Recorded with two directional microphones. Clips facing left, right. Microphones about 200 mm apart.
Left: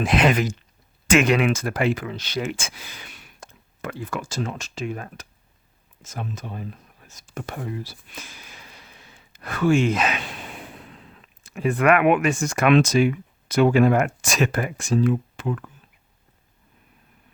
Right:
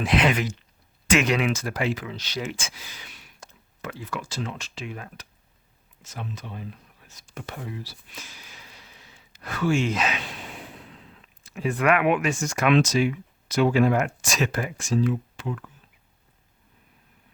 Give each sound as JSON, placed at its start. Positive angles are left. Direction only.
{"t": 0.0, "sound": "speech", "side_deg": 45}
{"t": 7.3, "sound": "whispering", "side_deg": 50}
{"t": 11.4, "sound": "speech", "side_deg": 55}